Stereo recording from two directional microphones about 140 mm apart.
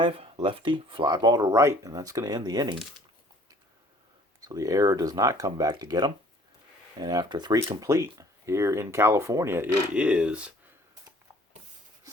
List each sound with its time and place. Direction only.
0.0 s speech: 45° right (ahead or behind)
4.4 s speech: 25° right (ahead or behind); by 10.5 s 5° right (ahead or behind)